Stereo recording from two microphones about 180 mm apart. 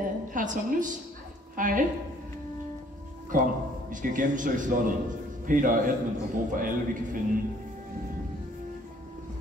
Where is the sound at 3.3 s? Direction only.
45° right (ahead or behind).